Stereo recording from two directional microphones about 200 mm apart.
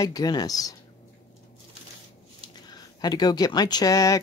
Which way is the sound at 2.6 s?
20° left (ahead or behind).